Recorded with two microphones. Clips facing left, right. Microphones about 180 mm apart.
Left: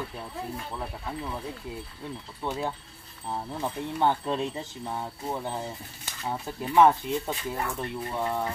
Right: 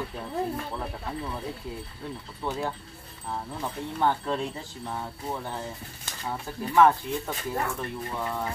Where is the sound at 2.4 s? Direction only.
15° left (ahead or behind).